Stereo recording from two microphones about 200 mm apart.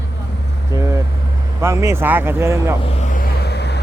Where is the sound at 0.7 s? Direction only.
15° right (ahead or behind).